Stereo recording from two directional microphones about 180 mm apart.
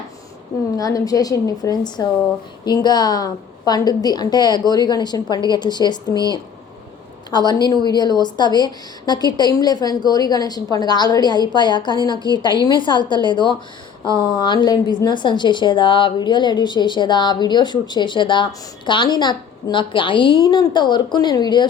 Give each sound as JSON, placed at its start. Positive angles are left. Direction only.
{"t": 0.8, "sound": "a woman's voice", "side_deg": 20}
{"t": 7.3, "sound": "a woman's voice", "side_deg": 25}